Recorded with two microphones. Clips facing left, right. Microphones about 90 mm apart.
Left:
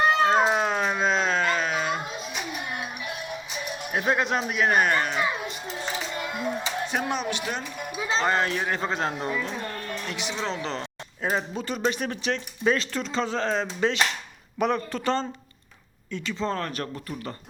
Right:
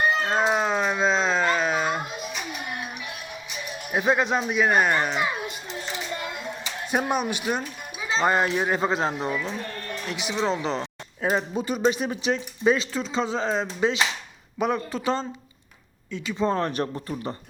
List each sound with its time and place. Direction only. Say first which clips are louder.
0.3 s speech: left 1 dB; centre (ahead or behind)
3.9 s speech: right 2 dB; 5° right (ahead or behind)
4.9 s speech: right 1 dB; 15° right (ahead or behind)
6.9 s speech: right 6 dB; 10° right (ahead or behind)